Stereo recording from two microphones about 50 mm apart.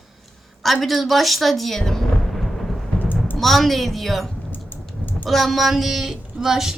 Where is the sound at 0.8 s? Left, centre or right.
Centre.